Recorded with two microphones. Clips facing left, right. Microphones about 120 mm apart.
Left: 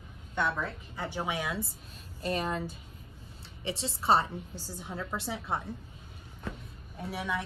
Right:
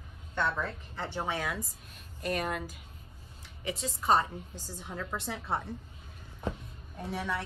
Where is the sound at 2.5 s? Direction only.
30° left (ahead or behind).